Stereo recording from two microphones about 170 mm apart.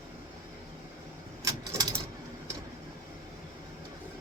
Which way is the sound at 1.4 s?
20° right (ahead or behind).